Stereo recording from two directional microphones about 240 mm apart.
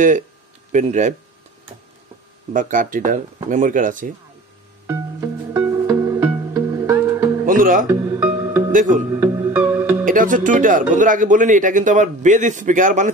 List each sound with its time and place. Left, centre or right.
0.7 s speech: right
2.5 s speech: right
4.8 s music: centre
7.4 s music: right
7.9 s music: centre
8.7 s speech: right
9.1 s music: centre
10.0 s speech: right